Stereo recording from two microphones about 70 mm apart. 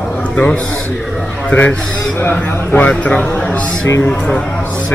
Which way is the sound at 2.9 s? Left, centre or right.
Centre.